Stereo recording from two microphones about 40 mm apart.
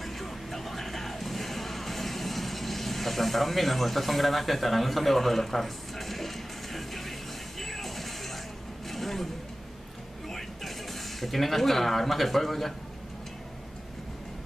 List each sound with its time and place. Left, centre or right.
0.0 s music: centre
8.9 s vehicle: centre
10.3 s speech: centre